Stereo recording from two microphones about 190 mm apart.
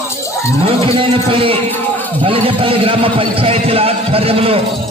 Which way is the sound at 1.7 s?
10° left (ahead or behind).